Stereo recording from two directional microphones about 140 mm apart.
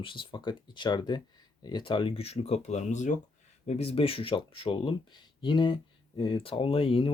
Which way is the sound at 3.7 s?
45° left (ahead or behind).